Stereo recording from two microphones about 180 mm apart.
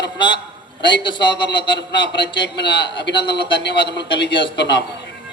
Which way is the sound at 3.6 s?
70° left (ahead or behind).